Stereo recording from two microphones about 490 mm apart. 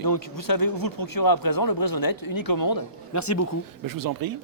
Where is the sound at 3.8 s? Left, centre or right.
Right.